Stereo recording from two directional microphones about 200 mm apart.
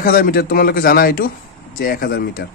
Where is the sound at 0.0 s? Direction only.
45° left (ahead or behind).